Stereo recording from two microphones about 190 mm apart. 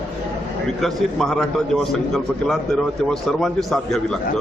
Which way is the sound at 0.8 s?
Centre (ahead or behind).